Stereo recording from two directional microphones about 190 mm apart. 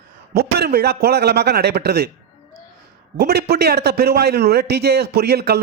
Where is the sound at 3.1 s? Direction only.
55° right (ahead or behind).